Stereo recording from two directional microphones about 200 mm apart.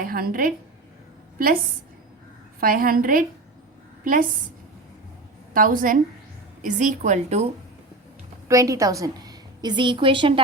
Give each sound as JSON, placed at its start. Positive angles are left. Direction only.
{"t": 0.0, "sound": "a woman's voice", "side_deg": -45}
{"t": 2.6, "sound": "a woman's voice", "side_deg": -45}
{"t": 5.5, "sound": "a woman's voice", "side_deg": -45}
{"t": 8.4, "sound": "a woman's voice", "side_deg": -15}